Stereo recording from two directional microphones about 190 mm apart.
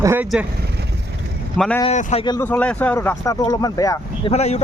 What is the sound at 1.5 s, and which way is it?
Speech, centre (ahead or behind).